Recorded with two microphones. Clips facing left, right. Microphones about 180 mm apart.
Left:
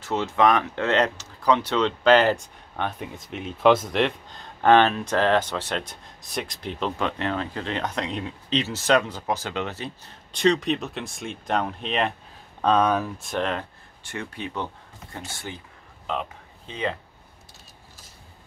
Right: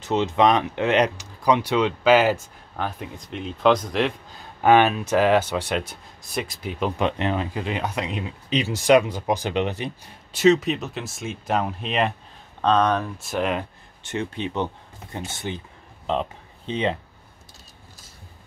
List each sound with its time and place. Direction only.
0.0 s speech: 20° right (ahead or behind)
7.0 s speech: 20° right (ahead or behind)
12.6 s speech: 10° left (ahead or behind); by 16.9 s 25° right (ahead or behind)